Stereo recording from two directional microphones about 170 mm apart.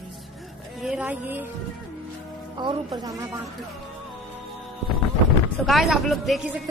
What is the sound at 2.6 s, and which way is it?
Speech, 25° right (ahead or behind).